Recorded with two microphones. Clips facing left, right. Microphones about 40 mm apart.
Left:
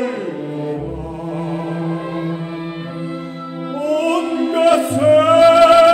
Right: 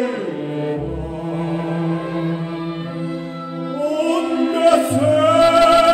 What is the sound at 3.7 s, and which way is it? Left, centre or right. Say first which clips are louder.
Opera: left 2 dB; left.